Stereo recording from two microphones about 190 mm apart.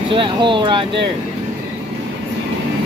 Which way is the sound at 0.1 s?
25° right (ahead or behind).